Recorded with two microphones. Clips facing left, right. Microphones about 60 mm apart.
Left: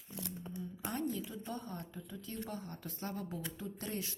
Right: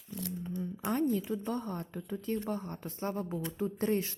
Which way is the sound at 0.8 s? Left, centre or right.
Right.